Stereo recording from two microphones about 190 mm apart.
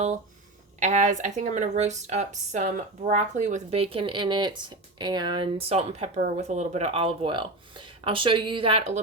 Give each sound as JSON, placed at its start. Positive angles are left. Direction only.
{"t": 0.8, "sound": "speech", "side_deg": -40}